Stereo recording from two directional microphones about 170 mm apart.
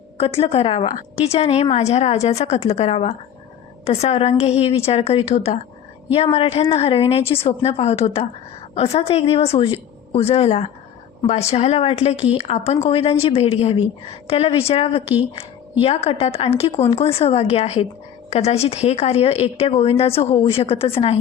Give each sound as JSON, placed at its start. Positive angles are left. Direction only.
{"t": 0.2, "sound": "a woman's voice", "side_deg": 35}